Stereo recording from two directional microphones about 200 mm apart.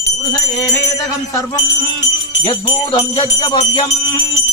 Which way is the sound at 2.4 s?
25° left (ahead or behind).